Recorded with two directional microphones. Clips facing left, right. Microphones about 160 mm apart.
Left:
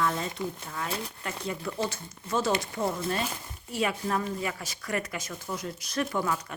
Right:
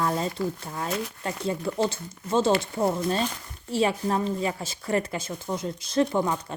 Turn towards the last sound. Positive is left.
turn(degrees=-30)  # may be behind; listen again after turning